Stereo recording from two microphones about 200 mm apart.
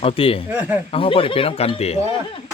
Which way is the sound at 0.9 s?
25° left (ahead or behind).